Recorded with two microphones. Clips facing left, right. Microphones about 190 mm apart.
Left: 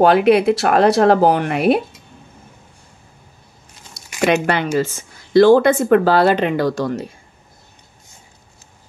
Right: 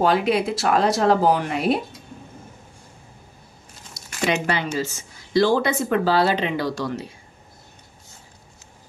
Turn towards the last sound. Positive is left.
turn(degrees=50)  # may be behind; listen again after turning